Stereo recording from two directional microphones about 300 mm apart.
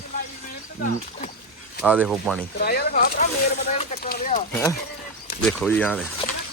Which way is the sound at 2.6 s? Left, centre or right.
Left.